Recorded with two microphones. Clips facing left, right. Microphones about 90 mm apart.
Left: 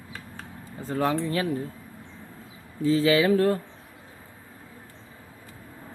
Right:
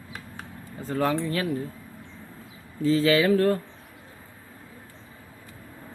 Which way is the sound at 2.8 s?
15° left (ahead or behind).